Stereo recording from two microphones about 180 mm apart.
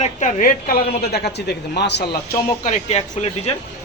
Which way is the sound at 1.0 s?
65° left (ahead or behind).